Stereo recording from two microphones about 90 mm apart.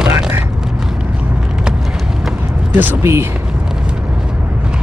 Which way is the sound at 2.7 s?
25° right (ahead or behind).